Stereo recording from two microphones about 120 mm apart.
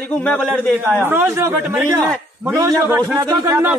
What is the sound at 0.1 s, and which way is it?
Speech, 10° left (ahead or behind).